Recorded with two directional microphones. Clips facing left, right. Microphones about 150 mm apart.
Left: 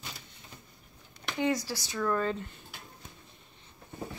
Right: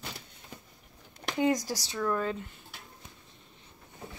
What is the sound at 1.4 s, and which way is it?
Speech, 45° right (ahead or behind).